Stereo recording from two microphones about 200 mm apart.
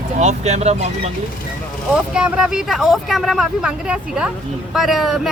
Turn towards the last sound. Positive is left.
turn(degrees=0)  # may be behind; listen again after turning